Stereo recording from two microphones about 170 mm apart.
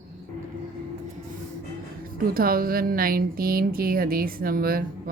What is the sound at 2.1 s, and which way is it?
A woman's voice, 60° right (ahead or behind).